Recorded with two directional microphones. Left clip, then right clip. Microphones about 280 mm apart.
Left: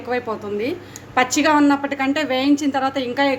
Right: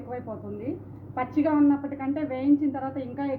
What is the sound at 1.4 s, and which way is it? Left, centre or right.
Speech, left.